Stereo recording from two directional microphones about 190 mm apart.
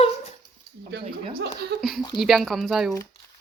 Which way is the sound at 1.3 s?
60° right (ahead or behind).